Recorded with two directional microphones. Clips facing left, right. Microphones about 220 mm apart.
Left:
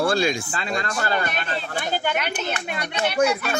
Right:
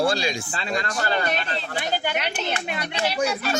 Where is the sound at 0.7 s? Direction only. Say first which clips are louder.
Even; 35° right (ahead or behind).